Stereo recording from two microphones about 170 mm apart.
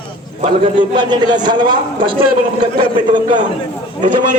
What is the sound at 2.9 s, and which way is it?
Speech, 50° right (ahead or behind).